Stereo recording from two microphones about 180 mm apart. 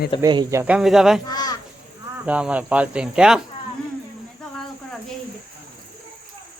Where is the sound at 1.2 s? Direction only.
20° left (ahead or behind).